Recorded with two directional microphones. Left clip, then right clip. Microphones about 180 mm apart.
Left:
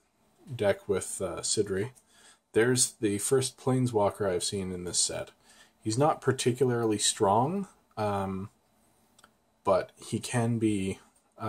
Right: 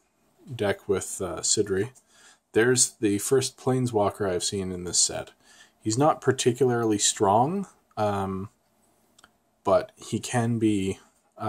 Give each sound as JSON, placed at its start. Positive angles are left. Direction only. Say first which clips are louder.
{"t": 0.6, "sound": "speech", "louder": "right 1 dB", "side_deg": -35}